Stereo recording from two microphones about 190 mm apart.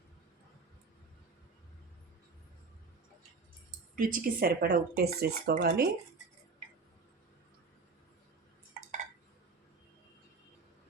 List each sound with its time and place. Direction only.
3.9 s speech: 50° right (ahead or behind)